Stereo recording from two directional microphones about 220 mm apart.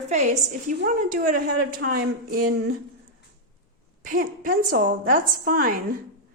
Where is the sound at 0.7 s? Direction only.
40° right (ahead or behind).